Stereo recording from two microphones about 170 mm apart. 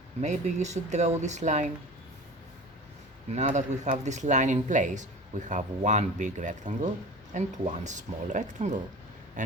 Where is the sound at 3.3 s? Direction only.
45° right (ahead or behind).